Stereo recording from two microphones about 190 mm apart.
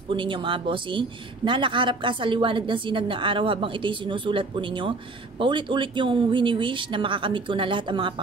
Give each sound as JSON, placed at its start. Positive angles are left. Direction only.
{"t": 0.1, "sound": "a woman's voice", "side_deg": -25}